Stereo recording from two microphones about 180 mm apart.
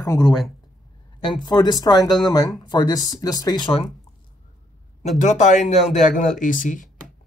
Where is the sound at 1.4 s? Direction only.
25° left (ahead or behind).